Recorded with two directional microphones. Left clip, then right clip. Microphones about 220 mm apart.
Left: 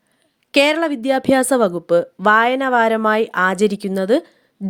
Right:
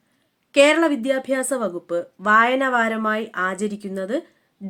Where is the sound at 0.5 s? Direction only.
35° left (ahead or behind).